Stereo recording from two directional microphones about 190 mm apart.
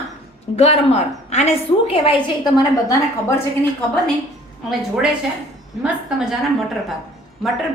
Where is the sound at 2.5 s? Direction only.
20° left (ahead or behind).